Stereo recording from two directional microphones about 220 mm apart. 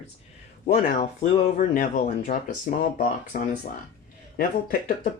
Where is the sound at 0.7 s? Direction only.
30° left (ahead or behind).